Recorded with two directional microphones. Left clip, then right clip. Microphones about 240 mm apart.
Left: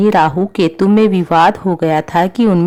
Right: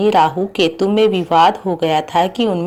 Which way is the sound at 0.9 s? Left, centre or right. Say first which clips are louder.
Even; left.